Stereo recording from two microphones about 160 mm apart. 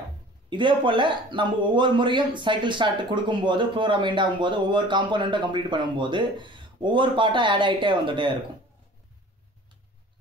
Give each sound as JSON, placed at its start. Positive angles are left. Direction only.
{"t": 0.5, "sound": "speech", "side_deg": -30}